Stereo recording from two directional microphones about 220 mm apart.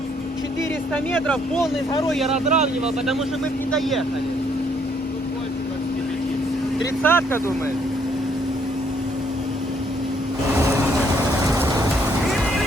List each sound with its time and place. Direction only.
1.1 s speech: 10° left (ahead or behind)
2.3 s speech: 30° right (ahead or behind)
3.7 s speech: centre (ahead or behind)
7.0 s speech: 10° left (ahead or behind)
10.5 s vehicle: 10° right (ahead or behind)